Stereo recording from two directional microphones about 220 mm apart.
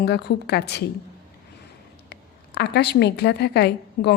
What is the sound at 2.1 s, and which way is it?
A woman's voice, 50° left (ahead or behind).